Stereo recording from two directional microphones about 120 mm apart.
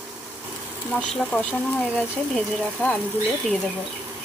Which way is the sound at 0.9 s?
5° left (ahead or behind).